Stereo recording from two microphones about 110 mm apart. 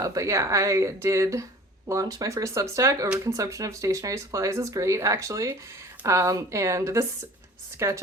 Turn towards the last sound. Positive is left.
turn(degrees=-25)  # may be behind; listen again after turning